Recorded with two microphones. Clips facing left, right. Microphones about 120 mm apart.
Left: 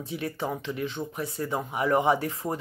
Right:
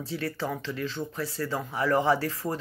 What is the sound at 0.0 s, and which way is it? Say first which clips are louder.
Speech: even; 20° left (ahead or behind).